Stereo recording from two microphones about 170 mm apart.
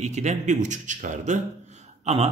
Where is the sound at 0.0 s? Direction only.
40° right (ahead or behind).